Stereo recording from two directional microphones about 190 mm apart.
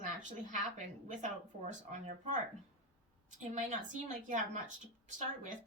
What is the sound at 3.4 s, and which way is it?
A woman's voice, 40° right (ahead or behind).